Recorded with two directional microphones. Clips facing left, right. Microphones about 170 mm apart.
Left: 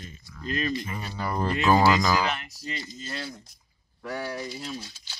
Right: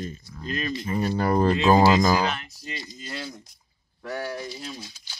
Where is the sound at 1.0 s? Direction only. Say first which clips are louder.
Right 8 dB; 50° right (ahead or behind).